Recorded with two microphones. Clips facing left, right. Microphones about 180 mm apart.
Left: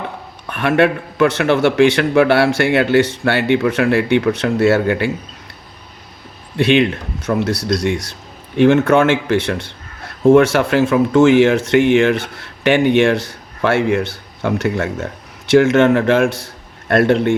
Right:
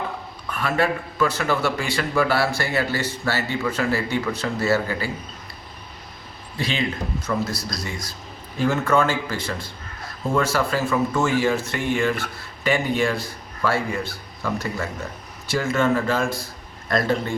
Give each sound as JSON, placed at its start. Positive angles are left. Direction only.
{"t": 0.4, "sound": "a man's voice", "side_deg": 75}
{"t": 6.6, "sound": "a man's voice", "side_deg": 70}
{"t": 16.9, "sound": "speech", "side_deg": 70}